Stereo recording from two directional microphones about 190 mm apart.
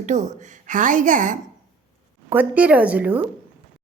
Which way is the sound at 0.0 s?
40° right (ahead or behind).